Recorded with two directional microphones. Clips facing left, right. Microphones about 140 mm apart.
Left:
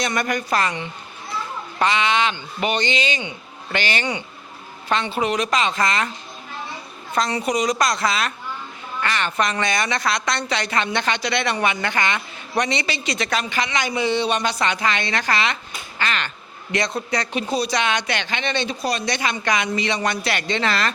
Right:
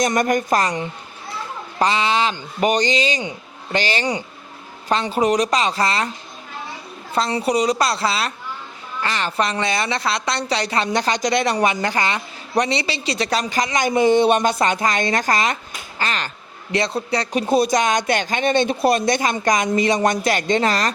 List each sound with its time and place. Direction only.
0.0 s a woman's voice: 45° right (ahead or behind)
7.1 s a woman's voice: 30° right (ahead or behind)
17.5 s speech: 50° right (ahead or behind)